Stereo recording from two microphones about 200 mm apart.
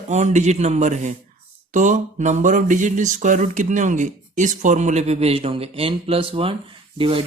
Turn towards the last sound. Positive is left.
turn(degrees=-25)  # may be behind; listen again after turning